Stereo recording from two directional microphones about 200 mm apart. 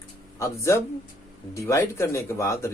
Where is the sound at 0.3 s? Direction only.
15° left (ahead or behind).